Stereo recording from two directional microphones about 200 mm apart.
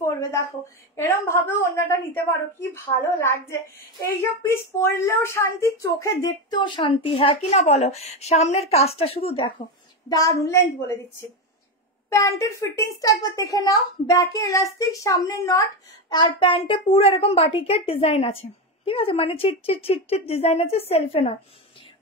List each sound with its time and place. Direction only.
0.0 s a sound: 15° left (ahead or behind)
0.9 s a woman's voice: 15° left (ahead or behind)
12.1 s a woman's voice: 15° left (ahead or behind)